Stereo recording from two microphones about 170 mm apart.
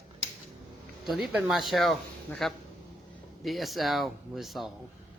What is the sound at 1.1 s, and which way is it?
Speech, centre (ahead or behind).